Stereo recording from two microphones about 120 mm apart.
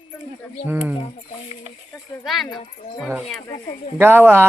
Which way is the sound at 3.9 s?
20° right (ahead or behind).